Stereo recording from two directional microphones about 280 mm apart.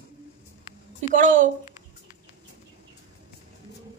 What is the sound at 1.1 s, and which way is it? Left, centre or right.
Speech, right.